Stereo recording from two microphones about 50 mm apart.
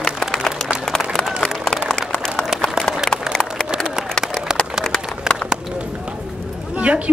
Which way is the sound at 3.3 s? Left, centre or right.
Centre.